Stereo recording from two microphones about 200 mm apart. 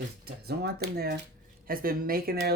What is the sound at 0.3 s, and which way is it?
Speech, 55° right (ahead or behind).